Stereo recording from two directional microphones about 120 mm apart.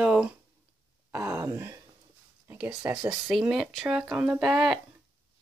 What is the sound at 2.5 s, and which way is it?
Speech, 15° right (ahead or behind).